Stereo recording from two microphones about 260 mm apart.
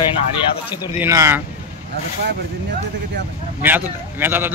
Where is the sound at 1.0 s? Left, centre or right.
Centre.